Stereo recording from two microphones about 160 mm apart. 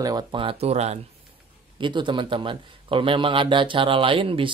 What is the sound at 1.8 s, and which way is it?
Speech, 30° right (ahead or behind).